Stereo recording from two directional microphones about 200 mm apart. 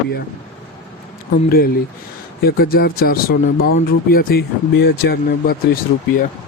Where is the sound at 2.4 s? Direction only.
50° left (ahead or behind).